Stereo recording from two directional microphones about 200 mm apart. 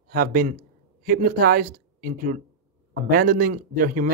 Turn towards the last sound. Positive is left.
turn(degrees=-45)  # may be behind; listen again after turning